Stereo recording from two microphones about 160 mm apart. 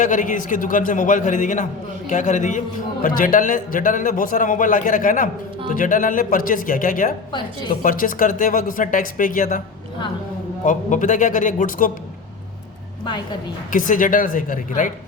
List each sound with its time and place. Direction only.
0.0 s a man's voice: 55° left (ahead or behind)
10.7 s a man's voice: 50° left (ahead or behind)
13.7 s a man's voice: 55° left (ahead or behind)